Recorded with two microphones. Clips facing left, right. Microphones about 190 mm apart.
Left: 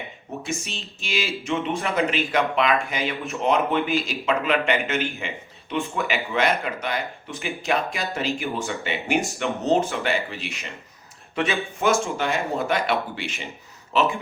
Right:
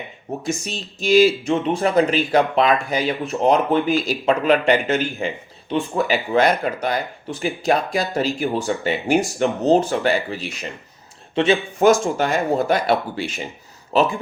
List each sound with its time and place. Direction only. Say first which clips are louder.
0.4 s speech: right 5 dB; 35° right (ahead or behind)